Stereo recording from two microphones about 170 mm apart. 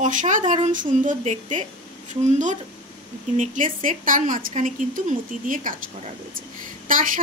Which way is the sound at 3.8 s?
50° right (ahead or behind).